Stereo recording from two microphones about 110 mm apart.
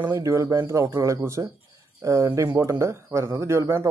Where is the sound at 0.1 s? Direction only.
30° right (ahead or behind).